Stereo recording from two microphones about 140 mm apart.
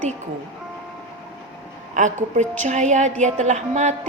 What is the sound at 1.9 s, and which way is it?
A woman's voice, 60° right (ahead or behind).